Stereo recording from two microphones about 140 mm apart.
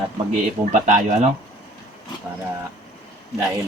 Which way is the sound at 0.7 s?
60° right (ahead or behind).